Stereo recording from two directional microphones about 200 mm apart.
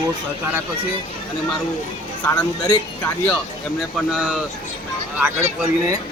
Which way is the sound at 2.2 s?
10° left (ahead or behind).